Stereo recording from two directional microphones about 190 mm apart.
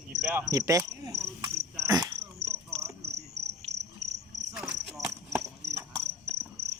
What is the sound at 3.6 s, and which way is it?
Cricket, 35° right (ahead or behind).